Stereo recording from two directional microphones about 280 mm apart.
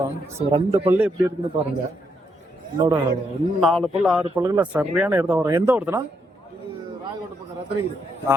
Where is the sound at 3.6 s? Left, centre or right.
Centre.